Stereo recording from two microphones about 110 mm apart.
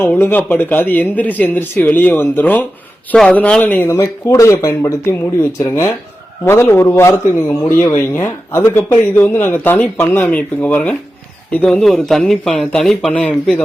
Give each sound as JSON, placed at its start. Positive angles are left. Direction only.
{"t": 0.0, "sound": "speech", "side_deg": 15}
{"t": 3.9, "sound": "speech", "side_deg": 30}
{"t": 11.6, "sound": "speech", "side_deg": 5}